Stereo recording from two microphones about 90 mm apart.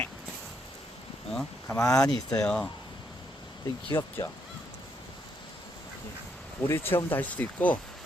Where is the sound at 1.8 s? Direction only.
10° left (ahead or behind).